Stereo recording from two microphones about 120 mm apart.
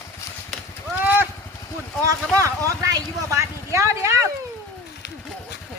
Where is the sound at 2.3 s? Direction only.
25° right (ahead or behind).